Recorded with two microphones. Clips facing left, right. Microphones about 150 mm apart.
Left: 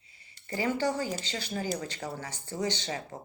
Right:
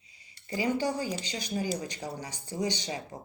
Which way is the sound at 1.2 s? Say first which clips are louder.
Right 1 dB; 15° right (ahead or behind).